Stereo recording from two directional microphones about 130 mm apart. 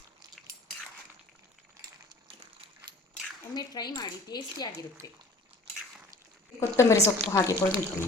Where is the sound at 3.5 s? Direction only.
30° left (ahead or behind).